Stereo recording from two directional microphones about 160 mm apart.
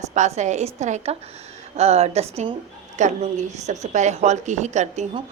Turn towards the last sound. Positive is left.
turn(degrees=-45)  # may be behind; listen again after turning